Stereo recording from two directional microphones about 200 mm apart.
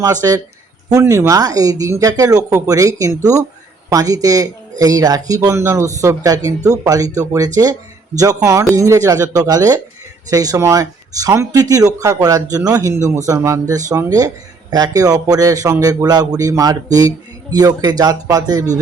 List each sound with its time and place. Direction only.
0.0 s a man's voice: 15° right (ahead or behind)